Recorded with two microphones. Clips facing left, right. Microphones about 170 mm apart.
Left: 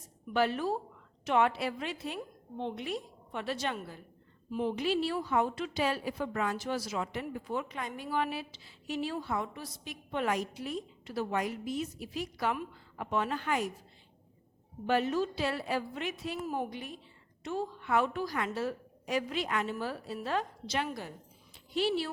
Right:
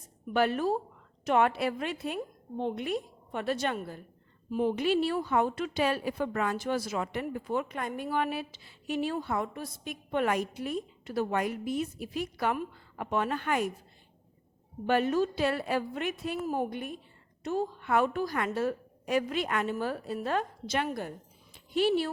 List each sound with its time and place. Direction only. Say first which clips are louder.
0.3 s a woman's voice: right 3 dB; 50° right (ahead or behind)
14.8 s a woman's voice: right 3 dB; 55° right (ahead or behind)
17.4 s a woman's voice: right 4 dB; 45° right (ahead or behind)
21.5 s a sound: right 4 dB; 55° right (ahead or behind)